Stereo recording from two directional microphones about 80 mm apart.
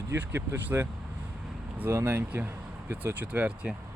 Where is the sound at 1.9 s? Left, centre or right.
Right; by 3.8 s centre.